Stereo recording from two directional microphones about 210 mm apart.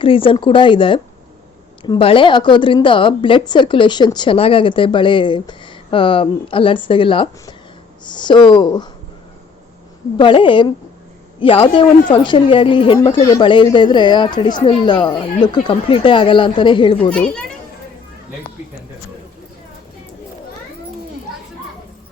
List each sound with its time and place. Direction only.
0.0 s a woman's voice: 25° left (ahead or behind)
10.2 s a woman's voice: 25° left (ahead or behind)
17.1 s a child's voice: 5° left (ahead or behind)